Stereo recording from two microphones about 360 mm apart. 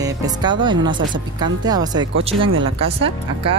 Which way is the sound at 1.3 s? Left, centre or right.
Centre.